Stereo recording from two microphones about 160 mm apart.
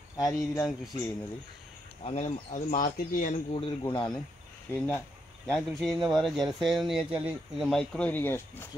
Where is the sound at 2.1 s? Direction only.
45° left (ahead or behind).